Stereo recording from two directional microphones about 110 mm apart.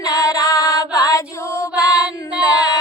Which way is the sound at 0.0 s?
30° left (ahead or behind).